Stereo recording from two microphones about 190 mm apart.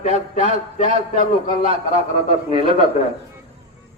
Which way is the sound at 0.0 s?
40° left (ahead or behind).